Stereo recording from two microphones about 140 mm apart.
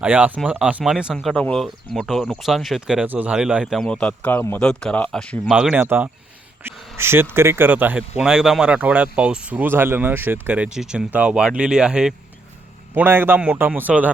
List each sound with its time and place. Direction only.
0.0 s speech: 10° right (ahead or behind); by 5.4 s 10° left (ahead or behind)
5.5 s speech: 5° right (ahead or behind)